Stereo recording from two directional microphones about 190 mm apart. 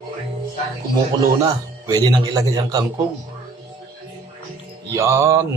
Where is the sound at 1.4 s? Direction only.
20° right (ahead or behind).